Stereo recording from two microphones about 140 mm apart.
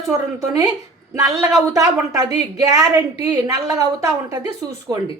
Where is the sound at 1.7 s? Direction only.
25° right (ahead or behind).